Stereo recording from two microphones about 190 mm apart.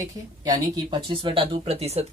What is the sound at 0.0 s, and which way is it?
Speech, 20° right (ahead or behind).